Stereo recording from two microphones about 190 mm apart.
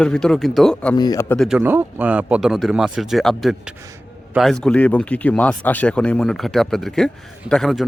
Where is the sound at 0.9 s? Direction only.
20° left (ahead or behind).